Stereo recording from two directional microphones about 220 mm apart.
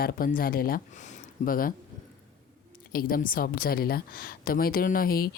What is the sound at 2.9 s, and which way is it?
A woman's voice, 40° left (ahead or behind).